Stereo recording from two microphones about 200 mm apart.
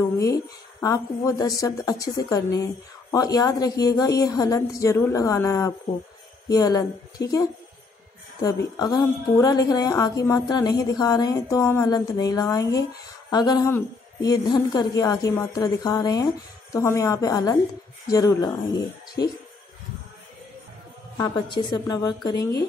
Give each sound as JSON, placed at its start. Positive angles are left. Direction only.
{"t": 0.2, "sound": "a woman's voice", "side_deg": 15}
{"t": 21.2, "sound": "a woman's voice", "side_deg": 20}